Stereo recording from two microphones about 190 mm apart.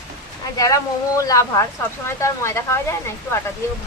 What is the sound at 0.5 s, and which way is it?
Speech, 15° left (ahead or behind).